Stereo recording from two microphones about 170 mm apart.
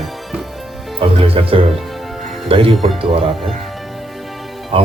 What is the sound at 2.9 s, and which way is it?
Speech, 35° right (ahead or behind).